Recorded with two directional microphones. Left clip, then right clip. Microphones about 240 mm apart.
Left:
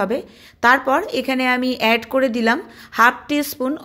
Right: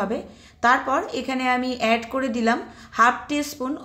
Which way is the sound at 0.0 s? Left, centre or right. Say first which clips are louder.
Left 5 dB; left.